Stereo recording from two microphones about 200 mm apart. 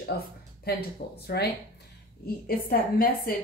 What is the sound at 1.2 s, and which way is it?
Speech, 55° left (ahead or behind).